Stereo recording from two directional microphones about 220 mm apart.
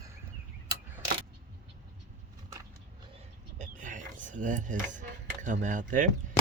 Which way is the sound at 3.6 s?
35° right (ahead or behind).